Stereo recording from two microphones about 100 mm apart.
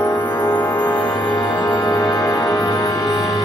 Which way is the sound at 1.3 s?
40° left (ahead or behind).